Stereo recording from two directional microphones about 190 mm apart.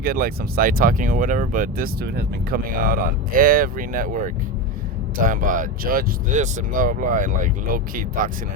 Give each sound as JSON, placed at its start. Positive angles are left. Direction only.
{"t": 0.0, "sound": "speech", "side_deg": -50}